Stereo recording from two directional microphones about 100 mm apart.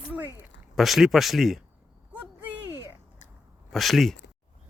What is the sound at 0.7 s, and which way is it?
Speech, centre (ahead or behind).